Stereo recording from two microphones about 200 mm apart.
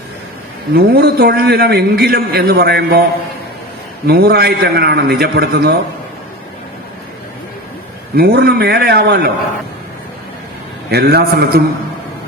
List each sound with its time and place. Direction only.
0.7 s a man's voice: 50° right (ahead or behind)
4.0 s a man's voice: 50° right (ahead or behind)
8.1 s a man's voice: 50° right (ahead or behind)
10.9 s a man's voice: 50° right (ahead or behind)